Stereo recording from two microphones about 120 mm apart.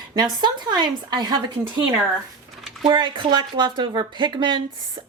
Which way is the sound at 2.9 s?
40° right (ahead or behind).